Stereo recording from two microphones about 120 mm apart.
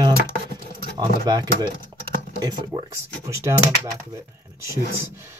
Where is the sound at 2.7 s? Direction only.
25° right (ahead or behind).